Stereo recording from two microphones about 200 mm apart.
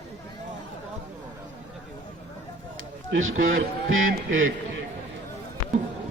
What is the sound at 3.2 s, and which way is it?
Speech, 80° right.